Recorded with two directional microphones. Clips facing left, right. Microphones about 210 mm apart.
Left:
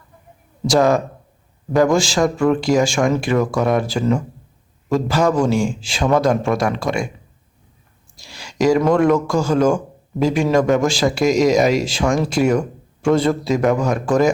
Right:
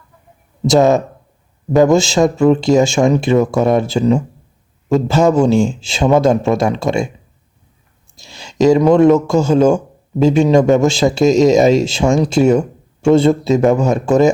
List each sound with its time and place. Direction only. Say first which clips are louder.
0.7 s a man's voice: right 4 dB; 25° right (ahead or behind)
8.1 s a man's voice: right 3 dB; 25° right (ahead or behind)